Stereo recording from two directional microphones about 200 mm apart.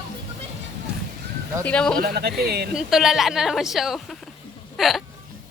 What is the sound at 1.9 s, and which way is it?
Speech, 50° right (ahead or behind).